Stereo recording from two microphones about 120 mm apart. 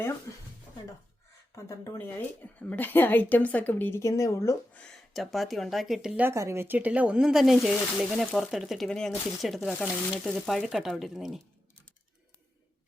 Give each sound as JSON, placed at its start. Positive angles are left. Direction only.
{"t": 1.5, "sound": "speech", "side_deg": 25}
{"t": 4.7, "sound": "speech", "side_deg": 10}
{"t": 5.1, "sound": "speech", "side_deg": 0}
{"t": 6.2, "sound": "speech", "side_deg": -25}